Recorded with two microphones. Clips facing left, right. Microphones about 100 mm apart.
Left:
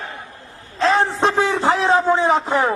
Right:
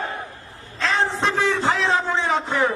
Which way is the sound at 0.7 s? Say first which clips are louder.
Left 5 dB; 40° left (ahead or behind).